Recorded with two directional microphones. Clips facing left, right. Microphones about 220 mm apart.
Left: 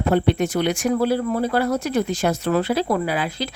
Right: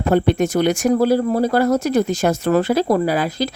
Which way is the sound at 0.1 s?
45° right (ahead or behind).